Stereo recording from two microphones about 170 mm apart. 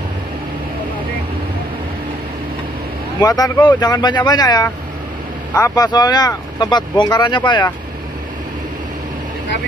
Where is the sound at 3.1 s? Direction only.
20° left (ahead or behind).